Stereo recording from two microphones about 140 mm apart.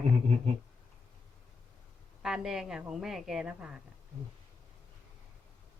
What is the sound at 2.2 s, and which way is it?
Speech, 5° right (ahead or behind).